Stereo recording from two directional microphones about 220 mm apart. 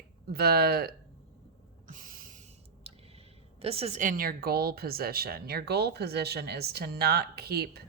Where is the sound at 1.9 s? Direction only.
40° right (ahead or behind).